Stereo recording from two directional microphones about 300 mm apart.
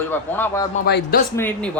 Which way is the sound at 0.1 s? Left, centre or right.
Centre.